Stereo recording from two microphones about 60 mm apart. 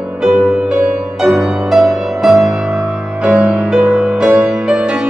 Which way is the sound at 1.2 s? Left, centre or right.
Centre.